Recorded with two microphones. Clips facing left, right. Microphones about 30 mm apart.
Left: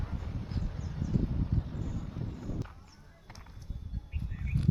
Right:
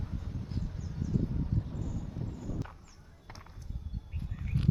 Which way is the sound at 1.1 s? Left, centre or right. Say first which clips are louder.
Even; left.